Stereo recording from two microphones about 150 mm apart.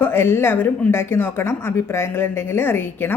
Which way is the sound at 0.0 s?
15° left (ahead or behind).